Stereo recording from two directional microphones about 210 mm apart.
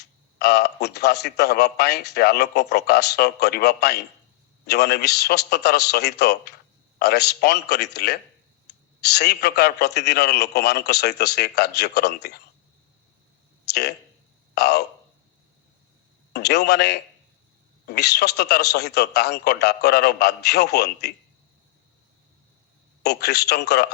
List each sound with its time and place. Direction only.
0.0 s a man's voice: 50° left (ahead or behind)
13.7 s a sound: 50° left (ahead or behind)
14.5 s speech: 50° left (ahead or behind)
16.3 s a man's voice: 50° left (ahead or behind)
23.0 s a man's voice: 50° left (ahead or behind)